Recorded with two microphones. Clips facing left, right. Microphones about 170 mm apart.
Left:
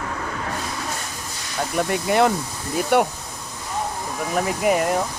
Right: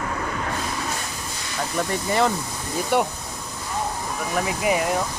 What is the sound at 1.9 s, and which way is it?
Speech, 65° left (ahead or behind).